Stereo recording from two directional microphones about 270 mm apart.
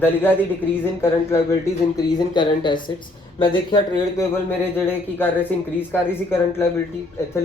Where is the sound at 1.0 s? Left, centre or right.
Centre.